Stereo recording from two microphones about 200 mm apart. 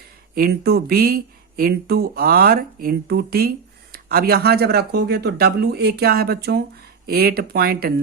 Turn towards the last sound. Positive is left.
turn(degrees=-50)  # may be behind; listen again after turning